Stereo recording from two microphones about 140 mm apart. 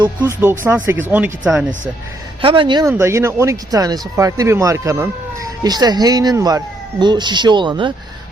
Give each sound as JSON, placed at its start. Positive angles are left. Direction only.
{"t": 0.3, "sound": "speech", "side_deg": -15}
{"t": 2.4, "sound": "speech", "side_deg": -40}
{"t": 2.8, "sound": "speech", "side_deg": -20}